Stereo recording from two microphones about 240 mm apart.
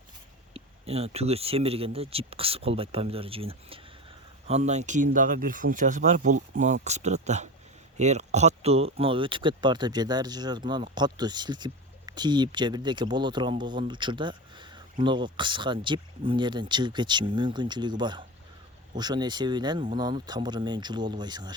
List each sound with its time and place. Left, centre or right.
0.5 s speech: right